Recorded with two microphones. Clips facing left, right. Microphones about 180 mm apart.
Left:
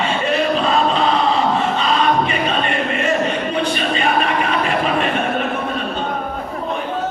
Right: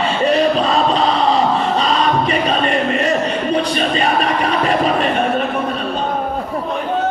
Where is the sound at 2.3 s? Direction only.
35° right (ahead or behind).